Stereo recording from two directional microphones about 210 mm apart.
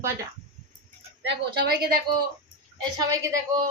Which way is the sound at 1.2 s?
50° right (ahead or behind).